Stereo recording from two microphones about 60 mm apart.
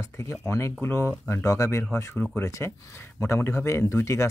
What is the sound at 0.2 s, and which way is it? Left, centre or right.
Speech, left.